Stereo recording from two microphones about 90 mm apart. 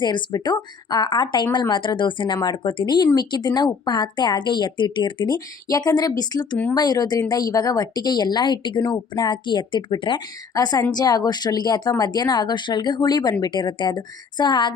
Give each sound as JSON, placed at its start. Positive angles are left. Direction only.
{"t": 0.0, "sound": "speech", "side_deg": 50}
{"t": 5.6, "sound": "speech", "side_deg": 45}
{"t": 10.5, "sound": "speech", "side_deg": 45}